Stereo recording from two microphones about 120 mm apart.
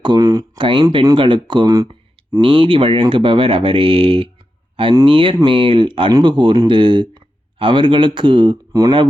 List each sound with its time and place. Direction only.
0.0 s speech: 35° right (ahead or behind)
0.6 s speech: 40° right (ahead or behind)
2.3 s speech: 45° right (ahead or behind)